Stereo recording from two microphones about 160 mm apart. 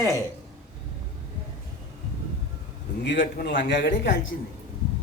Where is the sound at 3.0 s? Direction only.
80° left.